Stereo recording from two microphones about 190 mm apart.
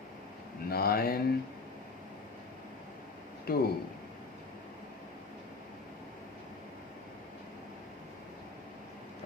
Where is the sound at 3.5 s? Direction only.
50° left (ahead or behind).